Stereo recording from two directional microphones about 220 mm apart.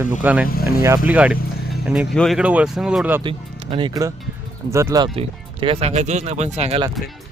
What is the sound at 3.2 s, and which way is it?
Speech, 20° right (ahead or behind).